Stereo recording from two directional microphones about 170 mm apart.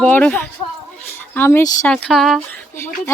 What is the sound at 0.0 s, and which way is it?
Speech, 5° left (ahead or behind).